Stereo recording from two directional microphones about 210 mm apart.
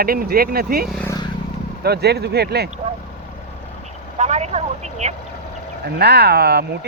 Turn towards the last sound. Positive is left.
turn(degrees=-50)  # may be behind; listen again after turning